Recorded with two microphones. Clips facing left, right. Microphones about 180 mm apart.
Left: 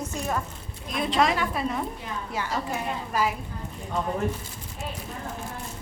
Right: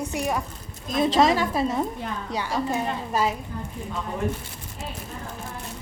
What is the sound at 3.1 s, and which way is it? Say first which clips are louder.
Speech: right 1 dB; 25° right (ahead or behind).